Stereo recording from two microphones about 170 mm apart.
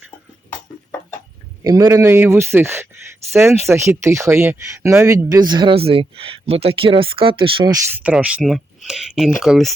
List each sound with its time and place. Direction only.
1.6 s speech: 20° right (ahead or behind)
8.0 s speech: 5° right (ahead or behind)